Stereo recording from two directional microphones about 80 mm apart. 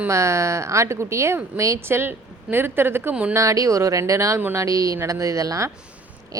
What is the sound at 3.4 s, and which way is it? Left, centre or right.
A woman's voice, right.